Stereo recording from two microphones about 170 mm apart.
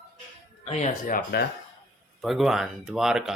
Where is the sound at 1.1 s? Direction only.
65° left (ahead or behind).